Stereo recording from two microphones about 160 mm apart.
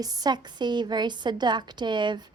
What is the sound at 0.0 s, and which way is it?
A woman's voice, 25° right (ahead or behind).